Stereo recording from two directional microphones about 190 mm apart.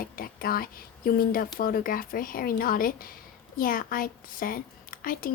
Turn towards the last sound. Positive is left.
turn(degrees=45)  # may be behind; listen again after turning